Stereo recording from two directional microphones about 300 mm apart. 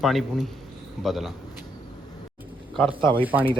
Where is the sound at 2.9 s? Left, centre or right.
Centre.